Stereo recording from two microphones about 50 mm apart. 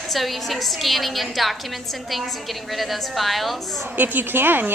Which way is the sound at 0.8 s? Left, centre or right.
Centre.